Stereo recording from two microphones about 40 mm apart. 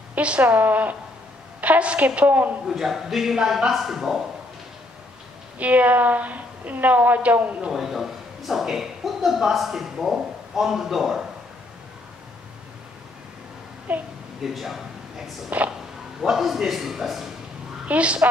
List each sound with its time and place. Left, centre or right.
0.1 s a woman's voice: right
0.5 s a woman's voice: right
1.6 s a woman's voice: right
2.7 s a woman's voice: centre
5.6 s a woman's voice: right
7.7 s a woman's voice: centre
13.9 s a woman's voice: right
14.4 s speech: centre
15.5 s a woman's voice: right
16.2 s a man's voice: centre
17.8 s a woman's voice: right